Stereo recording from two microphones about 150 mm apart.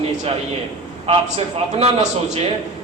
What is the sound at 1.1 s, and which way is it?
Speech, 40° right (ahead or behind).